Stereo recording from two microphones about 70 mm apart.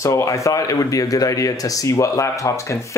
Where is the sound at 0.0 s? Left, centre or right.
Left.